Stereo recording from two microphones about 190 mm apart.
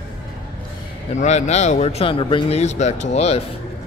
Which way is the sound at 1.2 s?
35° left (ahead or behind).